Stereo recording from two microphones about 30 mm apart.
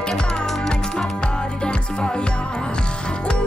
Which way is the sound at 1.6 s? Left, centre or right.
Left.